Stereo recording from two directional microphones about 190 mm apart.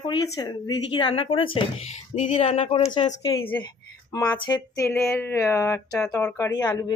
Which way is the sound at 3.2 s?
15° left (ahead or behind).